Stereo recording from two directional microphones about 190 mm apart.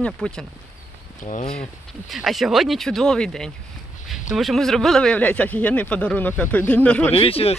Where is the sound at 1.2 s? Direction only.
40° left (ahead or behind).